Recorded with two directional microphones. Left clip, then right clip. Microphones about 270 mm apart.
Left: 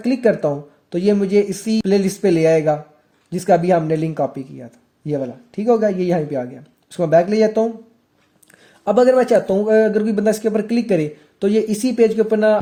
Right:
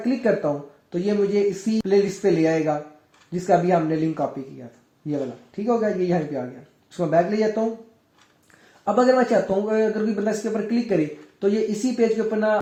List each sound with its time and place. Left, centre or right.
0.0 s speech: left
8.8 s speech: left